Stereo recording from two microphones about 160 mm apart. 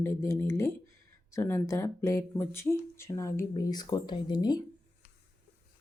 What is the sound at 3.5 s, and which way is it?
Speech, 25° left (ahead or behind).